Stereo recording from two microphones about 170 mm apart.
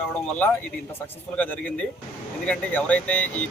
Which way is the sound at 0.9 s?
10° left (ahead or behind).